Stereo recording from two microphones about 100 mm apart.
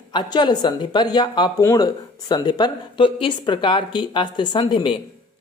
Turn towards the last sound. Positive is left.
turn(degrees=55)  # may be behind; listen again after turning